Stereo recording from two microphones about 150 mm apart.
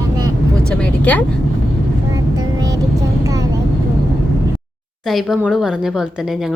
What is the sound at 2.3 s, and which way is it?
Vehicle, 25° right (ahead or behind).